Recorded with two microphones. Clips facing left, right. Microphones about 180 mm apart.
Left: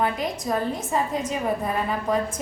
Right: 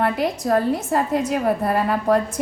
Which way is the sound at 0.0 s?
70° right (ahead or behind).